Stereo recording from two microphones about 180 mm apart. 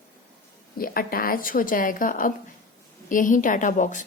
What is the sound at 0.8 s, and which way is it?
A woman's voice, 55° left (ahead or behind).